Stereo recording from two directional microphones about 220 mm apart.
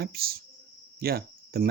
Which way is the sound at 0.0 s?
45° right (ahead or behind).